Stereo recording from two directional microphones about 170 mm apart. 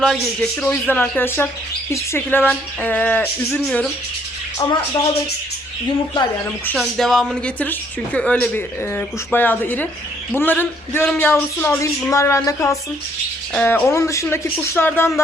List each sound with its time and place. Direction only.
0.0 s a man's voice: centre (ahead or behind)
4.6 s speech: 25° left (ahead or behind)
6.7 s a woman's voice: centre (ahead or behind); by 12.7 s 20° left (ahead or behind)
13.5 s a woman's voice: 5° left (ahead or behind)